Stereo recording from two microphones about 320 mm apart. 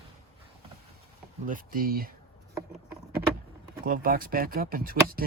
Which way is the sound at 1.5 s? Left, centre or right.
Right.